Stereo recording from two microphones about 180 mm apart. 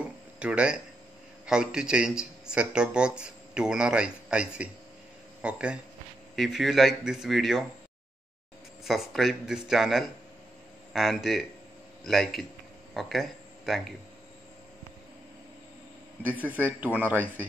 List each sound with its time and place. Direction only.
0.4 s speech: 5° right (ahead or behind)
8.8 s speech: centre (ahead or behind)
16.3 s speech: 10° right (ahead or behind)